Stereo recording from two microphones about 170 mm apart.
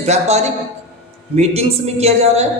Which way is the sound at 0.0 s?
40° right (ahead or behind).